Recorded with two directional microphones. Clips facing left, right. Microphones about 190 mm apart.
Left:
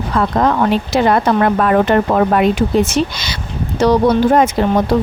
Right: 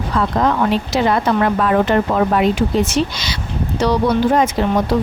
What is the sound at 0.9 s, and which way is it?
Speech, 50° left (ahead or behind).